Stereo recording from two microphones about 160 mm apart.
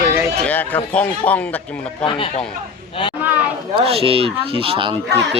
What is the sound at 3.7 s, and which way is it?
Speech, 35° right (ahead or behind).